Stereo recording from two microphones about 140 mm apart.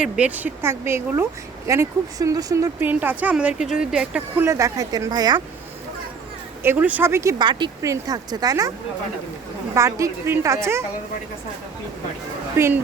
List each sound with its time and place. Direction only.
0.0 s a woman's voice: 10° right (ahead or behind); by 2.6 s 25° right (ahead or behind)
2.8 s speech: 15° right (ahead or behind)
4.4 s a woman's voice: 20° right (ahead or behind)
6.6 s speech: 15° right (ahead or behind)
7.4 s a woman's voice: 35° right (ahead or behind)
9.7 s a woman's voice: 20° right (ahead or behind)
12.5 s speech: 15° right (ahead or behind)